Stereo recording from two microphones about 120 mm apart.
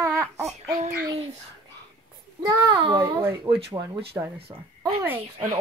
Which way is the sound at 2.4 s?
30° right (ahead or behind).